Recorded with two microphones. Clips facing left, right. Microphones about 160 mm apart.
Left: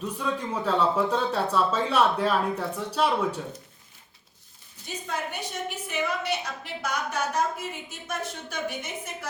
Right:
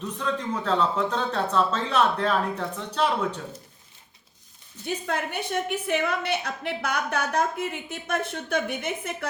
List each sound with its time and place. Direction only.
0.3 s speech: 10° left (ahead or behind)
5.0 s a woman's voice: 60° right (ahead or behind)